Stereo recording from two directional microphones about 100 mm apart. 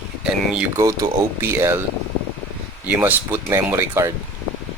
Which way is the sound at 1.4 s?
25° right (ahead or behind).